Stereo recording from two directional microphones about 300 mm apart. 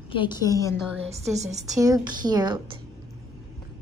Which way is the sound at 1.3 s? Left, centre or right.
Right.